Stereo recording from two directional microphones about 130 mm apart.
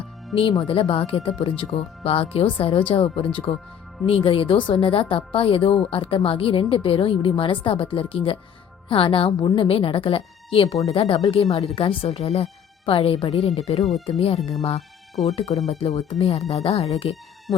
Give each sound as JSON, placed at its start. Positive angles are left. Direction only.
{"t": 0.6, "sound": "a woman's voice", "side_deg": 45}
{"t": 14.8, "sound": "music", "side_deg": 0}
{"t": 15.4, "sound": "a woman's voice", "side_deg": 50}